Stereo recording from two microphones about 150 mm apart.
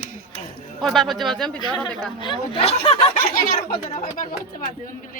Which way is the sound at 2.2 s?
35° left (ahead or behind).